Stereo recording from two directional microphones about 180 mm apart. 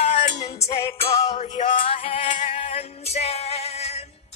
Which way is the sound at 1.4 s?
25° left (ahead or behind).